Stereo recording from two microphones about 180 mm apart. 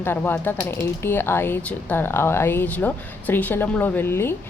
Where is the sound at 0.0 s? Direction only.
10° left (ahead or behind).